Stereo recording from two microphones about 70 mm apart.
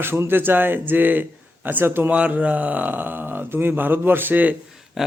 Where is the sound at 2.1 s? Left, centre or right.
Right.